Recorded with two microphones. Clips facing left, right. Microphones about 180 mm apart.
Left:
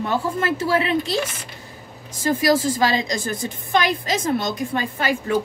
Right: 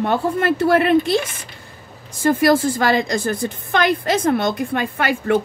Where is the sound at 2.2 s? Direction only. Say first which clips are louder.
Right 4 dB; 60° right (ahead or behind).